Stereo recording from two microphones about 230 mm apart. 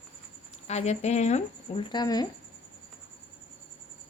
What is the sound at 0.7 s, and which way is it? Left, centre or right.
Speech, left.